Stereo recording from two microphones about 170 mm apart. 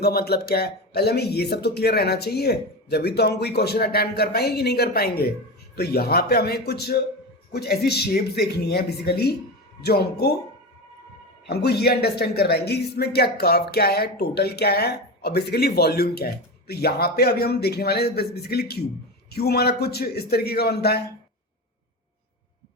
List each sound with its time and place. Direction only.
0.0 s speech: 65° left (ahead or behind)
11.4 s speech: 75° left (ahead or behind)